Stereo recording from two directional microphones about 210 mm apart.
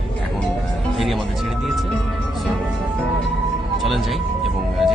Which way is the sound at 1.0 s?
Centre (ahead or behind).